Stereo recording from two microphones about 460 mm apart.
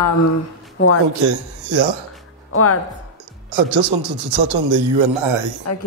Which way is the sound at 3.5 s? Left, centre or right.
Right.